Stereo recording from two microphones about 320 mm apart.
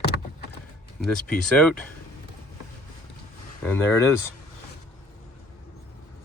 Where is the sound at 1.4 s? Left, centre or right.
Centre.